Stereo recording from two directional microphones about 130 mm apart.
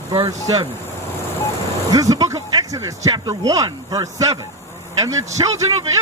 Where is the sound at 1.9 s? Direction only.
30° right (ahead or behind).